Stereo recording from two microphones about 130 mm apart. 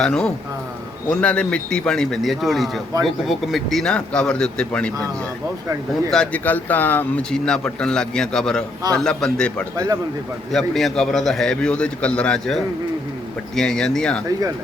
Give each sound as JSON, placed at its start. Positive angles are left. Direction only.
{"t": 0.0, "sound": "speech", "side_deg": 5}
{"t": 6.1, "sound": "speech", "side_deg": 10}
{"t": 9.7, "sound": "speech", "side_deg": -25}
{"t": 10.5, "sound": "speech", "side_deg": 0}